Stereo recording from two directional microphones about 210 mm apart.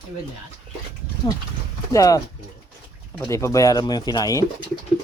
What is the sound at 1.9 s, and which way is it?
Speech, 15° left (ahead or behind).